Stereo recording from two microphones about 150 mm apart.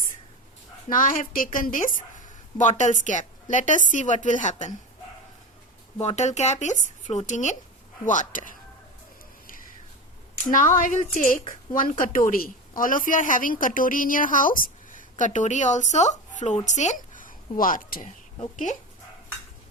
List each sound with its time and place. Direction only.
0.9 s a woman's voice: 65° left (ahead or behind)
6.0 s a woman's voice: 50° left (ahead or behind)
10.5 s a woman's voice: 60° left (ahead or behind)
15.2 s a woman's voice: 55° left (ahead or behind)